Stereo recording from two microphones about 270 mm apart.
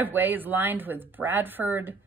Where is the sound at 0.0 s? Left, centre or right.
Centre.